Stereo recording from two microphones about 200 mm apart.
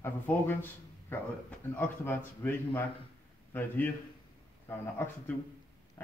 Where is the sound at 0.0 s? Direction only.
10° left (ahead or behind).